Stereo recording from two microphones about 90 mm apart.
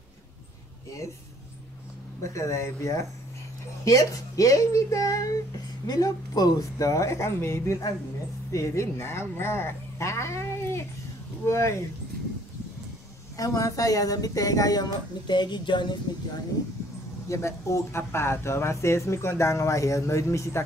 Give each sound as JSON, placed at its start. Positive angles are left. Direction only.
{"t": 2.2, "sound": "speech", "side_deg": 35}
{"t": 13.4, "sound": "speech", "side_deg": 40}
{"t": 17.3, "sound": "speech", "side_deg": 35}